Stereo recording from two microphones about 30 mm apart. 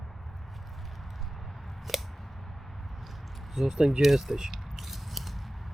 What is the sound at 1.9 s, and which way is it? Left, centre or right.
Scissors, centre.